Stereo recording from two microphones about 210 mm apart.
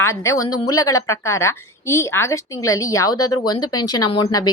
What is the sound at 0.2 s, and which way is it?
Speech, 15° left (ahead or behind).